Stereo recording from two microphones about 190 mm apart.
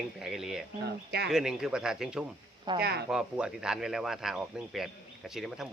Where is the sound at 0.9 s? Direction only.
60° right (ahead or behind).